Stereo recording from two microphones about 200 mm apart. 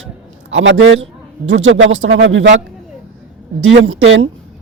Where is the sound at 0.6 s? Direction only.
70° right (ahead or behind).